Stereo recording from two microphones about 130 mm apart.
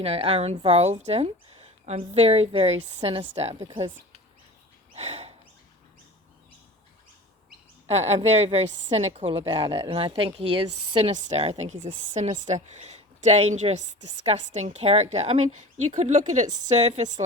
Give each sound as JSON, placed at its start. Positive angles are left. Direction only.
{"t": 0.0, "sound": "speech", "side_deg": -50}
{"t": 4.9, "sound": "bird", "side_deg": -55}
{"t": 7.9, "sound": "speech", "side_deg": -55}
{"t": 11.0, "sound": "a woman's voice", "side_deg": -55}
{"t": 14.8, "sound": "a woman's voice", "side_deg": -50}